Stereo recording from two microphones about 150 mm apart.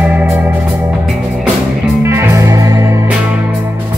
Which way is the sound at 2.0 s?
15° right (ahead or behind).